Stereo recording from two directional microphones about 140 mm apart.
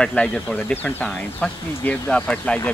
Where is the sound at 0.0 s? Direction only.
5° left (ahead or behind).